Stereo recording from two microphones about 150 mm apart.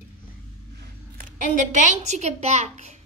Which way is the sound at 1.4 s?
55° right (ahead or behind).